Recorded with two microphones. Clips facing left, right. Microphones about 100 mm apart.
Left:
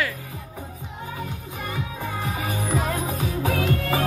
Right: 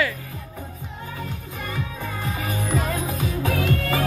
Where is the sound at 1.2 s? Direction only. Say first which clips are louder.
Right 1 dB; 15° left (ahead or behind).